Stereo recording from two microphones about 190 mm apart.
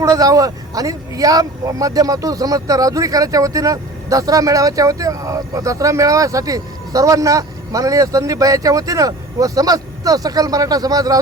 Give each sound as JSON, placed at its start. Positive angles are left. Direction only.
{"t": 0.0, "sound": "speech", "side_deg": -15}